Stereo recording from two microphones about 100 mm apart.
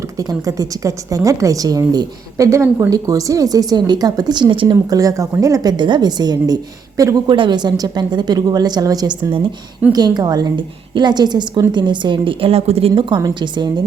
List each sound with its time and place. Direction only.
0.2 s a woman's voice: 35° right (ahead or behind); by 4.8 s 55° right (ahead or behind)
4.9 s a woman's voice: 35° right (ahead or behind)
7.3 s a woman's voice: 55° right (ahead or behind); by 12.9 s 90° right
13.0 s a woman's voice: 50° right (ahead or behind)